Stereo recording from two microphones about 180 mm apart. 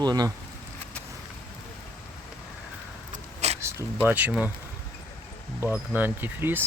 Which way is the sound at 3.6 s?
10° right (ahead or behind).